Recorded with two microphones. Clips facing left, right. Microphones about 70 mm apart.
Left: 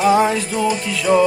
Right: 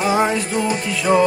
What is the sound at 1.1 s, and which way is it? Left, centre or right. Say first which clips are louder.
Music: left 1 dB; centre.